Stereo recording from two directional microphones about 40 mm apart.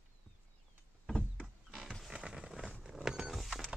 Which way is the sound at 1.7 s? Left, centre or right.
Centre.